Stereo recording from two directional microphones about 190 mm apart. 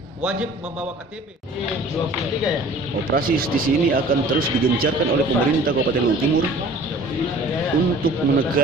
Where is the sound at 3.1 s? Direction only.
50° right (ahead or behind).